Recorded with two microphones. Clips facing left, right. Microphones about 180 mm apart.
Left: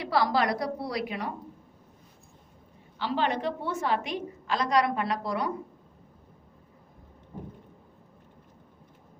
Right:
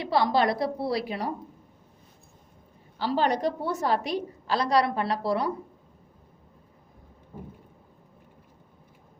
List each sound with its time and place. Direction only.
0.0 s a woman's voice: 25° right (ahead or behind)
3.0 s a woman's voice: 40° right (ahead or behind)